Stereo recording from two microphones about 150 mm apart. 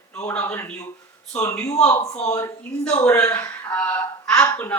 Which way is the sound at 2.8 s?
5° left (ahead or behind).